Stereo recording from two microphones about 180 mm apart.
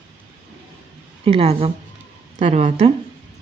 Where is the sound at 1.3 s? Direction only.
35° right (ahead or behind).